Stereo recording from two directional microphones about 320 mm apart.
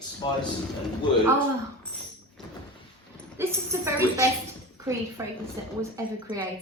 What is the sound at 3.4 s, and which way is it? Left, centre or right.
Speech, centre.